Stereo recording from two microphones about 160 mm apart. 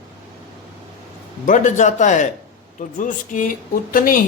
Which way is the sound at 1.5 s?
50° left (ahead or behind).